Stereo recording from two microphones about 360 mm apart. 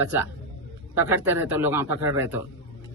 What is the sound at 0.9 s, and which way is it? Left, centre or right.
A man's voice, centre.